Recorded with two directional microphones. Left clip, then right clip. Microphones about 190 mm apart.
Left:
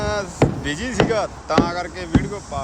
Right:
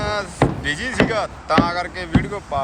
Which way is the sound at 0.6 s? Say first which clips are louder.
Right 1 dB; 20° left (ahead or behind).